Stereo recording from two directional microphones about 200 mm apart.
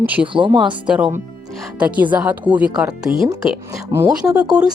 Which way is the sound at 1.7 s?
5° right (ahead or behind).